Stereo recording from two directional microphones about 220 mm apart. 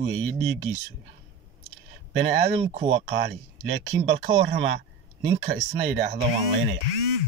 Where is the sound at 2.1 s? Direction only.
55° right (ahead or behind).